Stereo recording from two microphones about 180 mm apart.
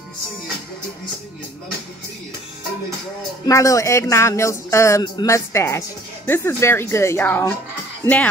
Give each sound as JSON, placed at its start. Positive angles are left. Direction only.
{"t": 3.4, "sound": "speech", "side_deg": 15}